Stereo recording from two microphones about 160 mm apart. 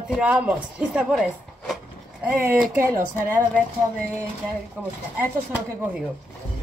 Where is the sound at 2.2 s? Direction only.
5° right (ahead or behind).